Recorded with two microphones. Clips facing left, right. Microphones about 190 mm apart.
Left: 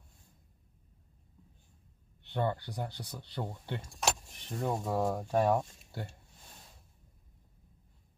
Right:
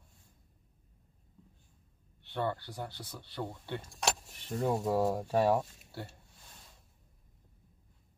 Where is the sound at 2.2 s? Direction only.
15° left (ahead or behind).